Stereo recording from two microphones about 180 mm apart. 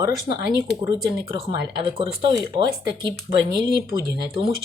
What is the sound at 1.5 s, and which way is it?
Speech, 30° right (ahead or behind).